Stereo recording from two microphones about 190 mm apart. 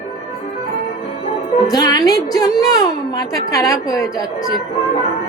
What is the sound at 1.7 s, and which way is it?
A woman's voice, 20° left (ahead or behind).